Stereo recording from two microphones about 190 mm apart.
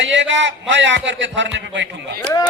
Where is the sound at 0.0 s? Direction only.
75° right (ahead or behind).